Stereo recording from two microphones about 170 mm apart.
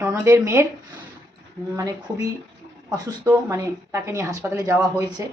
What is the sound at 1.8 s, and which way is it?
A woman's voice, 20° right (ahead or behind).